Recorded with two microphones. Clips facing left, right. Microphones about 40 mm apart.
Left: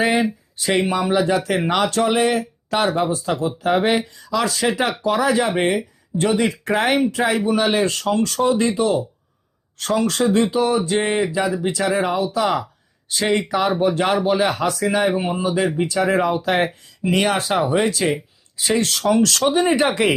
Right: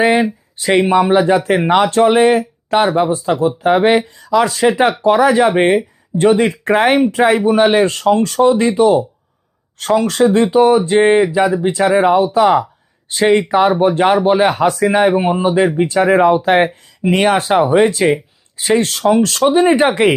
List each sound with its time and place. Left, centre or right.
0.0 s speech: right
0.6 s speech: right
8.6 s speech: right
9.7 s speech: right